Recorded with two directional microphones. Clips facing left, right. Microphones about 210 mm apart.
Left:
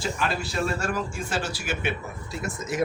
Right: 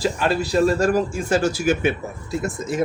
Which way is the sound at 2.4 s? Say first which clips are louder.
Right 3 dB; 30° right (ahead or behind).